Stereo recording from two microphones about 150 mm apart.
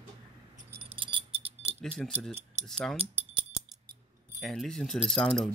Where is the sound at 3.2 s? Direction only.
10° right (ahead or behind).